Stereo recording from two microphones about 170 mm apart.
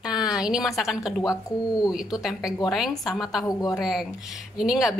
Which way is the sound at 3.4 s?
20° left (ahead or behind).